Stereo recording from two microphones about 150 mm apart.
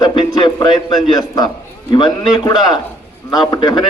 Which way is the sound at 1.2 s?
25° left (ahead or behind).